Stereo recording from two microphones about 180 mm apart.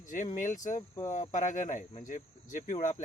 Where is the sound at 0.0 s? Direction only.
45° left (ahead or behind).